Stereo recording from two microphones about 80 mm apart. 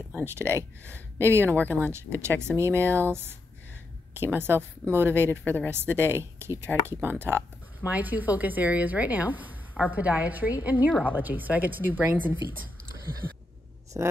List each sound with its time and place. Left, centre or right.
0.1 s speech: right
1.5 s speech: left
2.2 s a woman's voice: right
5.4 s speech: left
5.7 s a woman's voice: right
13.2 s a sound: right
13.9 s speech: right